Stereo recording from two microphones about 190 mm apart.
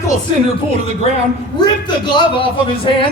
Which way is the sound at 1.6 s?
25° left (ahead or behind).